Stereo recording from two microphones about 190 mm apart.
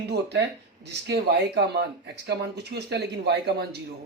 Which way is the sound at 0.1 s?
60° right (ahead or behind).